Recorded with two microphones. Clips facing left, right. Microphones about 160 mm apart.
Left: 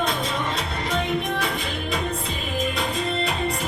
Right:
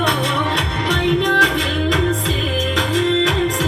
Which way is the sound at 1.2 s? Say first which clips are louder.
Right 8 dB; 90° right.